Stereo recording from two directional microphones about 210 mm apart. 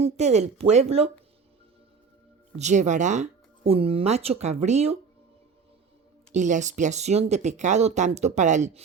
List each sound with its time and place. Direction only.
0.0 s speech: 30° right (ahead or behind)
2.6 s speech: 35° right (ahead or behind)
6.3 s speech: 35° right (ahead or behind)